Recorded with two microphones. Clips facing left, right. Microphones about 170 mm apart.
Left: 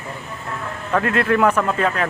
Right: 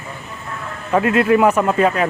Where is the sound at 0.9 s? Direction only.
10° right (ahead or behind).